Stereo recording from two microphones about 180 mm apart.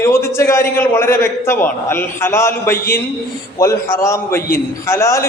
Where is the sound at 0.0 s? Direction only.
15° left (ahead or behind).